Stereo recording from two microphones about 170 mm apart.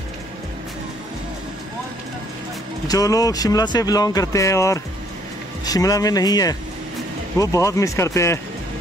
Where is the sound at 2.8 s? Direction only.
20° left (ahead or behind).